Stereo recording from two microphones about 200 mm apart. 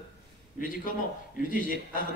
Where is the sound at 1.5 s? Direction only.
45° left (ahead or behind).